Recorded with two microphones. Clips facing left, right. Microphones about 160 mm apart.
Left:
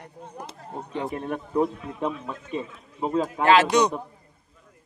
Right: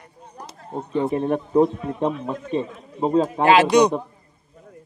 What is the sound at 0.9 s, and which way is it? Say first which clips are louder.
A man's voice: right 8 dB; 35° right (ahead or behind).